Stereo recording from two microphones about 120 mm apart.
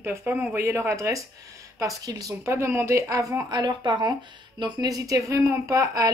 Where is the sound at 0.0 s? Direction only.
20° right (ahead or behind).